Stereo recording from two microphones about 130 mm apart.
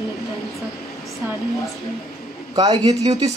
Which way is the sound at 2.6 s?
30° right (ahead or behind).